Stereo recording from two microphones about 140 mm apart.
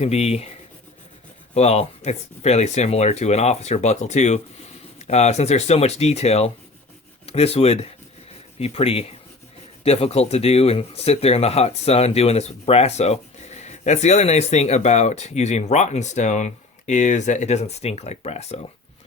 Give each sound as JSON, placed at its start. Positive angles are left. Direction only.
{"t": 0.0, "sound": "speech", "side_deg": 50}
{"t": 1.5, "sound": "speech", "side_deg": 50}